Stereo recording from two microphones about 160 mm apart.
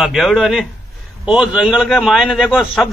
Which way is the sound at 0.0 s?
Centre (ahead or behind).